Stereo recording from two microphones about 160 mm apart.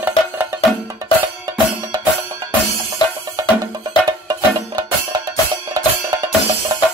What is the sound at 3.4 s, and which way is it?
Music, 25° right (ahead or behind).